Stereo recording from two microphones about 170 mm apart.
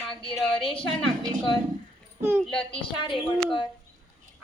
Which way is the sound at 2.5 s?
30° left (ahead or behind).